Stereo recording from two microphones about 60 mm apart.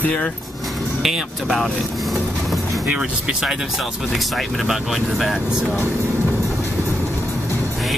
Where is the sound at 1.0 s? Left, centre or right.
Centre.